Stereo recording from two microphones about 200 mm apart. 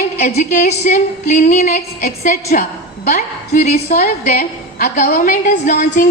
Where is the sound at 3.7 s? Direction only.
50° left (ahead or behind).